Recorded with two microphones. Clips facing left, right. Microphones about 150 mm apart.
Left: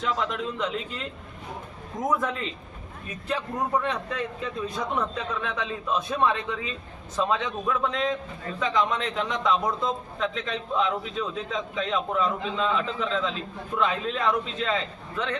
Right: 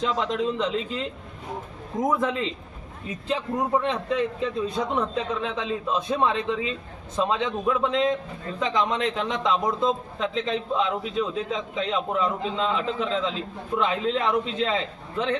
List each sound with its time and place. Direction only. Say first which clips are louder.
0.0 s a man's voice: right 3 dB; 25° right (ahead or behind)
3.2 s a man's voice: right 3 dB; 25° right (ahead or behind)